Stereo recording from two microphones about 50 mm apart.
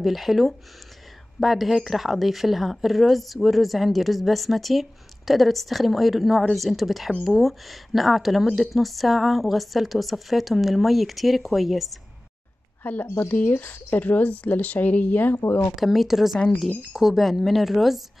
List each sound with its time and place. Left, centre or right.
0.0 s a woman's voice: centre
13.0 s speech: left
13.3 s speech: left
15.7 s a woman's voice: centre